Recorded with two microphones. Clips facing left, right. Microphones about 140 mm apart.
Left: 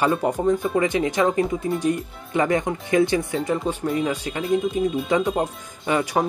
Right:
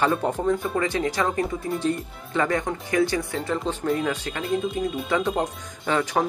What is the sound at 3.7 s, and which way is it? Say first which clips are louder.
Speech: left 1 dB; 10° left (ahead or behind).